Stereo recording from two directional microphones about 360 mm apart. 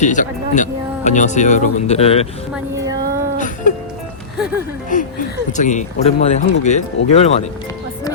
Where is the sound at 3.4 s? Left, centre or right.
Left.